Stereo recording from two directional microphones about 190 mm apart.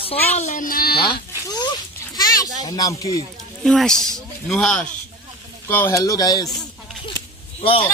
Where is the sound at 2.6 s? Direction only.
20° left (ahead or behind).